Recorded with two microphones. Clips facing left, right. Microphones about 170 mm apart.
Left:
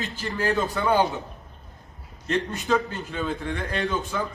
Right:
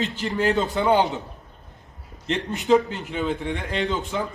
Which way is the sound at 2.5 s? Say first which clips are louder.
Right 5 dB; 20° right (ahead or behind).